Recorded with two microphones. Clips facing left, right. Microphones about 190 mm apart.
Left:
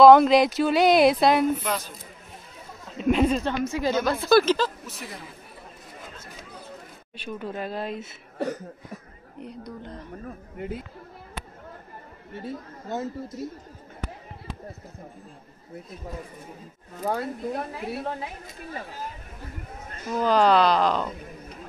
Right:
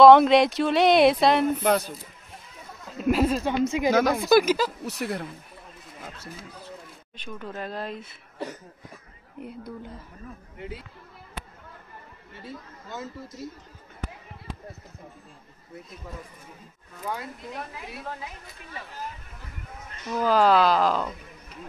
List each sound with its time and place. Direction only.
0.0 s speech: centre (ahead or behind)
3.0 s speech: 5° right (ahead or behind)
3.6 s speech: 20° right (ahead or behind)
4.8 s a woman's voice: 65° right (ahead or behind)
7.2 s speech: 10° left (ahead or behind)
9.7 s speech: 5° right (ahead or behind)
10.6 s speech: 50° left (ahead or behind)
12.4 s speech: 40° left (ahead or behind)
16.9 s speech: 45° left (ahead or behind)
19.9 s a sound: 30° left (ahead or behind)
20.2 s speech: 5° right (ahead or behind)